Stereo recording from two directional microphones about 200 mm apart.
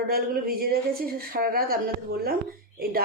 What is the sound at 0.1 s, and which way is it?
A woman's voice, 50° right (ahead or behind).